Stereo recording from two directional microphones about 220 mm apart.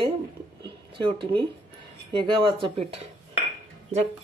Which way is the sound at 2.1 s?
20° right (ahead or behind).